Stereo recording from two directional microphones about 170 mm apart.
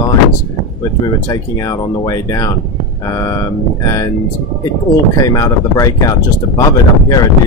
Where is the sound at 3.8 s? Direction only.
20° left (ahead or behind).